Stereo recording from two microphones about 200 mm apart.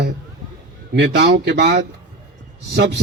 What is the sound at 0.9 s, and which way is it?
A man's voice, 60° right (ahead or behind).